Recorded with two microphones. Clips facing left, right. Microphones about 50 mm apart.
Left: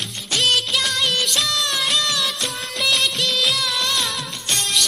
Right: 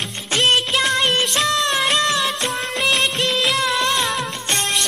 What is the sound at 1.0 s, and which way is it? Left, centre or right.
Music of bollywood, right.